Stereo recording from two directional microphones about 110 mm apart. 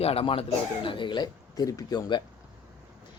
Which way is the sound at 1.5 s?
30° left (ahead or behind).